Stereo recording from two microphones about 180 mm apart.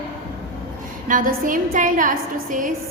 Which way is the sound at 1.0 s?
50° right (ahead or behind).